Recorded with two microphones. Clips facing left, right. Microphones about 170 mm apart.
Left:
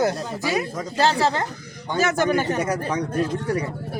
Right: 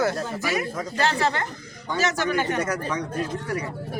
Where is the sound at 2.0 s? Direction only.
50° left (ahead or behind).